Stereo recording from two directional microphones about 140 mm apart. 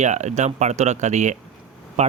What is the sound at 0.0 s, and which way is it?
Speech, 55° right (ahead or behind).